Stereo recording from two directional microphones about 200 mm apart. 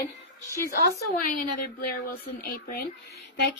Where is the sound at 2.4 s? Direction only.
55° left (ahead or behind).